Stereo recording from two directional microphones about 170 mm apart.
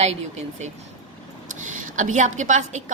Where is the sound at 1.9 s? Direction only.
45° right (ahead or behind).